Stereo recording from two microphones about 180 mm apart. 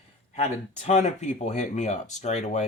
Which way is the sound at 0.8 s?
40° left (ahead or behind).